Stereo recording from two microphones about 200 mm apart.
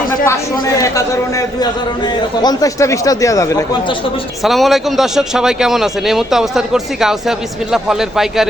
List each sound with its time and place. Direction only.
0.8 s a man's voice: 15° left (ahead or behind)
4.4 s a man's voice: centre (ahead or behind)